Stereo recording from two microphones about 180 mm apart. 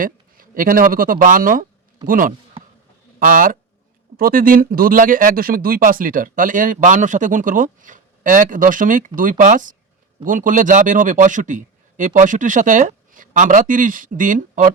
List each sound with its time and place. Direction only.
0.0 s speech: 50° right (ahead or behind)